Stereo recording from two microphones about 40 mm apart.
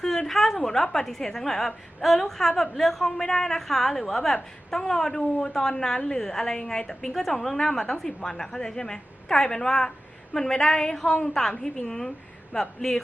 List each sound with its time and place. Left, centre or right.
0.0 s a woman's voice: centre